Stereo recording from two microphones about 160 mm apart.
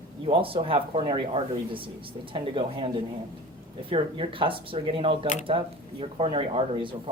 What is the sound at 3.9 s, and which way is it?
Speech, 35° right (ahead or behind).